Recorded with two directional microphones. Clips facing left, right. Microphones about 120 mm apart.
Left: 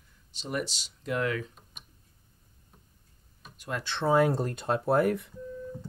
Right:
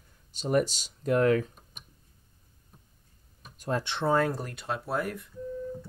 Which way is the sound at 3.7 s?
30° right (ahead or behind).